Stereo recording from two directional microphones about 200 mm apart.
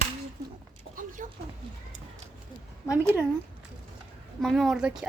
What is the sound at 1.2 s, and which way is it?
Speech, 40° right (ahead or behind).